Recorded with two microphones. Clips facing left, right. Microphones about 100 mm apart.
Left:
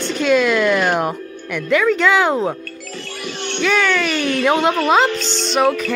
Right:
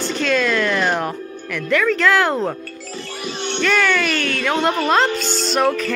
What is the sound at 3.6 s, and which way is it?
Speech, centre (ahead or behind).